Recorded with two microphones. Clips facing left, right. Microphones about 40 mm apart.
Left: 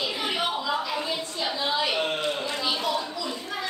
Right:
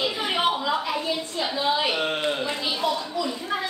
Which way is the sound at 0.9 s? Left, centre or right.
Centre.